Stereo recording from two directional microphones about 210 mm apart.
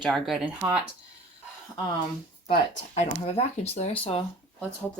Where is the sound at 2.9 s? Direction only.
30° left (ahead or behind).